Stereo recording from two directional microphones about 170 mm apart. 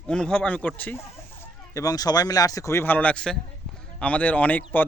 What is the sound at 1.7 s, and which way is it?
A man's voice, 20° left (ahead or behind).